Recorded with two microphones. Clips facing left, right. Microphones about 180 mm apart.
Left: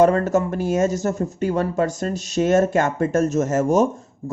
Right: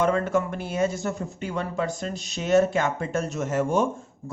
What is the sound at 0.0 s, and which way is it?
Speech, 45° left (ahead or behind).